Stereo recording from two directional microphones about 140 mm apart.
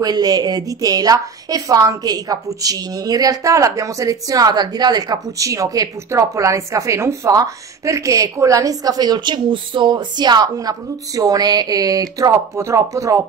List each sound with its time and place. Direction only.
0.0 s a woman's voice: 25° right (ahead or behind)